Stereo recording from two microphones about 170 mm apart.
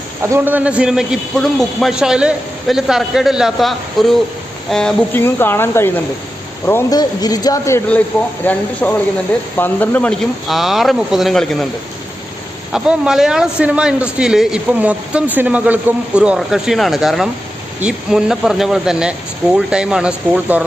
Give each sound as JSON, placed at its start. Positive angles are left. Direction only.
{"t": 0.2, "sound": "speech", "side_deg": -10}
{"t": 12.7, "sound": "speech", "side_deg": -5}